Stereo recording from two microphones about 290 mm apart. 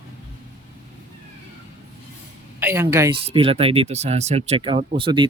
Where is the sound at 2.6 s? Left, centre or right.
Centre.